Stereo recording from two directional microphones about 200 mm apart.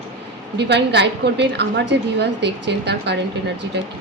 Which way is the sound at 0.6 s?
55° right (ahead or behind).